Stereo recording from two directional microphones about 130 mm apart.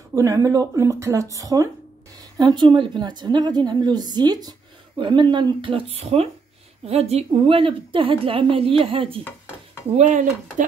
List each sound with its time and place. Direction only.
0.1 s a woman's voice: 25° right (ahead or behind); by 9.2 s 45° right (ahead or behind)
9.9 s speech: 70° right (ahead or behind)